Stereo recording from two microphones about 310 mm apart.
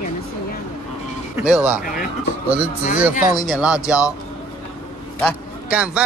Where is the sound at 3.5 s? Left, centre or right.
Centre.